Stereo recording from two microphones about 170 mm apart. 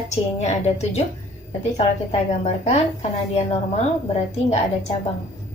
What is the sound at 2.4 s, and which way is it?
A woman's voice, 40° left (ahead or behind).